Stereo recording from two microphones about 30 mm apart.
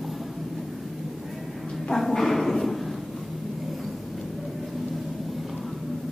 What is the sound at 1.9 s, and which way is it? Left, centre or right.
Bow-wow, centre.